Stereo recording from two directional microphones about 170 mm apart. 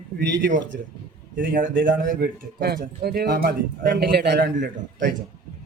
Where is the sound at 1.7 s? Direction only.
90° right.